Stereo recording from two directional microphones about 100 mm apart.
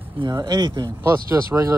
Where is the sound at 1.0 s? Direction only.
30° right (ahead or behind).